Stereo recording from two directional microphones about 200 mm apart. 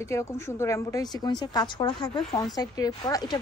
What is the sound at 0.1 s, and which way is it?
A woman's voice, 15° left (ahead or behind).